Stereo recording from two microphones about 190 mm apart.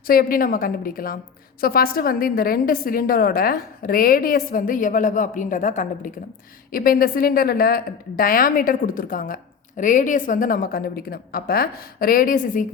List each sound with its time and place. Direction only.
0.1 s a woman's voice: 50° left (ahead or behind)